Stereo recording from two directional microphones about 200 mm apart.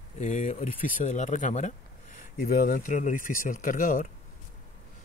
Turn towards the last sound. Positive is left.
turn(degrees=40)  # may be behind; listen again after turning